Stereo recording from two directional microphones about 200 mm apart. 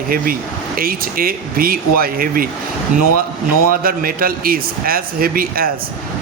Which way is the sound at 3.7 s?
45° right (ahead or behind).